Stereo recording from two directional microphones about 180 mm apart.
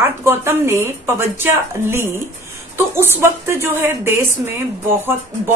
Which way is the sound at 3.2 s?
15° right (ahead or behind).